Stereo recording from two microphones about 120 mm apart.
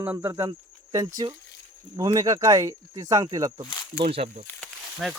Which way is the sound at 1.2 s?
40° right (ahead or behind).